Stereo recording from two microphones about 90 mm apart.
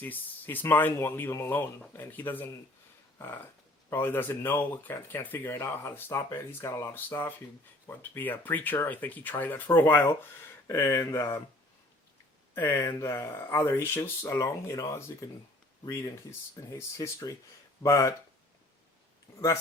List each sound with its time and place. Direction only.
0.0 s speech: 20° left (ahead or behind)
3.2 s a sound: 30° left (ahead or behind)
3.8 s speech: 25° left (ahead or behind)
12.5 s speech: 30° left (ahead or behind)
14.3 s speech: 45° left (ahead or behind)
16.6 s speech: 35° left (ahead or behind)